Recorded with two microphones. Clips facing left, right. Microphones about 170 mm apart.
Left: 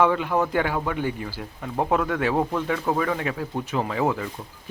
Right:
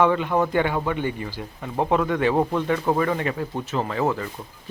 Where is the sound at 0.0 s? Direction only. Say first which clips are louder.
Right 1 dB; 5° left (ahead or behind).